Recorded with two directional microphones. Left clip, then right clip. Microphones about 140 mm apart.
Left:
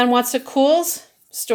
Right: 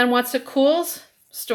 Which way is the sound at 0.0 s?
35° left (ahead or behind).